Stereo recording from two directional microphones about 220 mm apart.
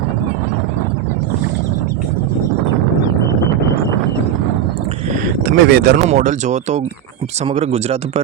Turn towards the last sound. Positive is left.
turn(degrees=-30)  # may be behind; listen again after turning